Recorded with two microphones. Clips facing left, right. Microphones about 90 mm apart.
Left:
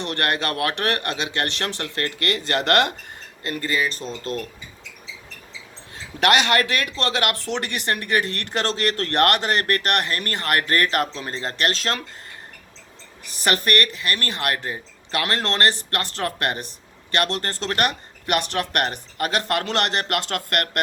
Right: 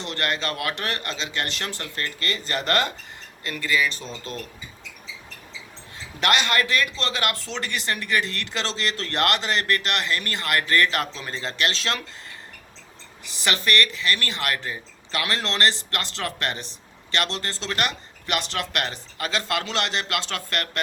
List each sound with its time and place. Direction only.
0.0 s a man's voice: 60° left (ahead or behind)
3.4 s speech: 45° left (ahead or behind)
6.1 s speech: 55° left (ahead or behind); by 12.0 s 40° left (ahead or behind)
13.4 s speech: 50° left (ahead or behind)